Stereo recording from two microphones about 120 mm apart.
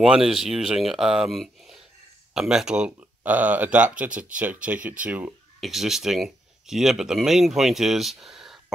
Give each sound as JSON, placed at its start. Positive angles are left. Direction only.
{"t": 0.0, "sound": "speech", "side_deg": -5}